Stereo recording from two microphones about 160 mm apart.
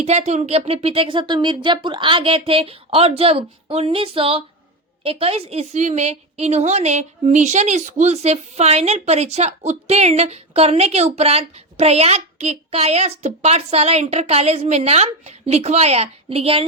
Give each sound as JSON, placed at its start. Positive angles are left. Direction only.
{"t": 0.0, "sound": "a woman's voice", "side_deg": -45}